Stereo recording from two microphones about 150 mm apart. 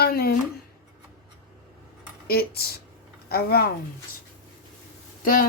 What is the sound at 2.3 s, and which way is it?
Speech, 90° left.